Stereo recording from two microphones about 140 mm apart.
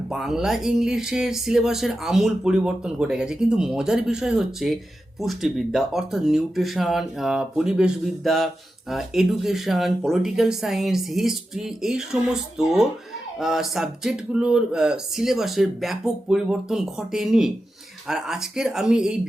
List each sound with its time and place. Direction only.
0.1 s speech: 5° right (ahead or behind)